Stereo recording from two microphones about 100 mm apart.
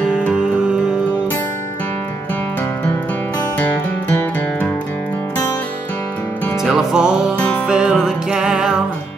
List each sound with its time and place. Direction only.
3.7 s music: 20° left (ahead or behind)
6.6 s music: 5° right (ahead or behind)